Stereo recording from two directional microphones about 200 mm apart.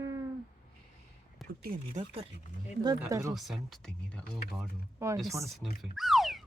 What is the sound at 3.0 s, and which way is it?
Speech, 15° right (ahead or behind).